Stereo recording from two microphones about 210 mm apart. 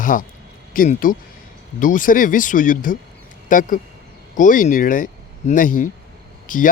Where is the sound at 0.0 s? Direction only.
40° left (ahead or behind).